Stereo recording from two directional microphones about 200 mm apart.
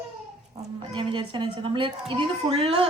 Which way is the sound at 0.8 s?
25° right (ahead or behind).